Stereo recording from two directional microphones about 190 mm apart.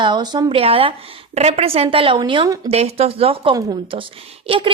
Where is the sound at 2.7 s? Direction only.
35° right (ahead or behind).